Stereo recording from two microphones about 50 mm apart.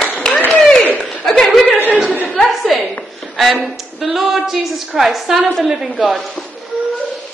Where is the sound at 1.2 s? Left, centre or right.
Centre.